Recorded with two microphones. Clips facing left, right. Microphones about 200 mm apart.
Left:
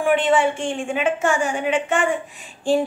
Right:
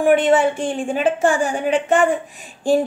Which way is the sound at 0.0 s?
40° right (ahead or behind).